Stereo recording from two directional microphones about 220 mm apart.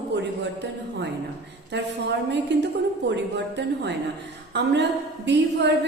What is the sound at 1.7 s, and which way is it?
A woman's voice, 50° right (ahead or behind).